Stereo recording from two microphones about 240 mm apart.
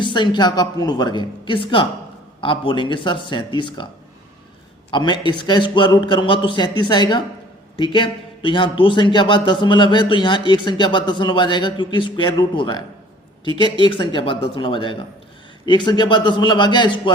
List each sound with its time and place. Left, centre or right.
0.0 s a man's voice: centre
4.9 s a man's voice: centre